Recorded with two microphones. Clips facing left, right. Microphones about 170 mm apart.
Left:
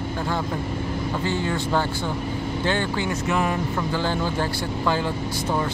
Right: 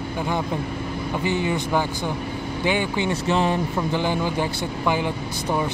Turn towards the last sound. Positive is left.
turn(degrees=-15)  # may be behind; listen again after turning